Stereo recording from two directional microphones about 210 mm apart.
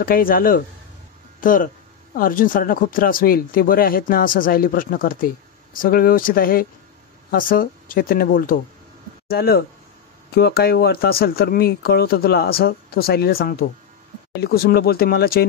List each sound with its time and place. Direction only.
0.0 s speech: 45° left (ahead or behind)